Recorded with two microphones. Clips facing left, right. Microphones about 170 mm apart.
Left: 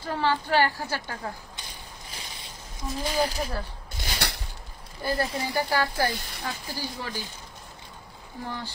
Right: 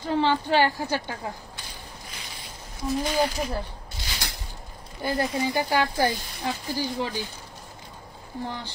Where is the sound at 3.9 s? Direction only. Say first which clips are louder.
Left 5 dB; 60° left (ahead or behind).